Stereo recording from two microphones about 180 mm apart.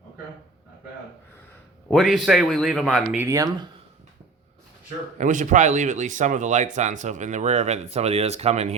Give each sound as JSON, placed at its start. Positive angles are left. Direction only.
{"t": 1.9, "sound": "speech", "side_deg": 0}
{"t": 3.2, "sound": "speech", "side_deg": -20}
{"t": 5.1, "sound": "speech", "side_deg": -45}